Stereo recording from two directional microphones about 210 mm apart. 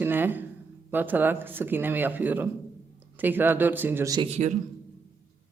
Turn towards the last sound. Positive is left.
turn(degrees=-35)  # may be behind; listen again after turning